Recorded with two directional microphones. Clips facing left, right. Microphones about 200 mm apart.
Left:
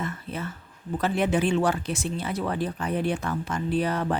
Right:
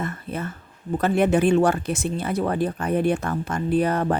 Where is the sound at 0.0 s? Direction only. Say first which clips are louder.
Right 3 dB; 50° right (ahead or behind).